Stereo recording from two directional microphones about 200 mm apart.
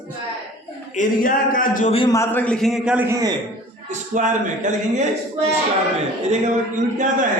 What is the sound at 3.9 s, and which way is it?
Speech, 40° right (ahead or behind).